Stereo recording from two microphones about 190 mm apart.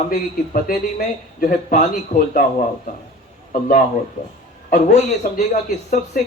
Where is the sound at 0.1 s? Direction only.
50° left (ahead or behind).